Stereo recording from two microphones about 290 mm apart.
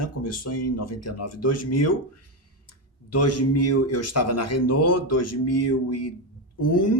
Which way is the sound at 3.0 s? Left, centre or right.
Left.